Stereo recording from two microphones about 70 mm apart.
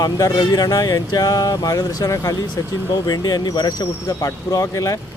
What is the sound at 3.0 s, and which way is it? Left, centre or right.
Speech, left.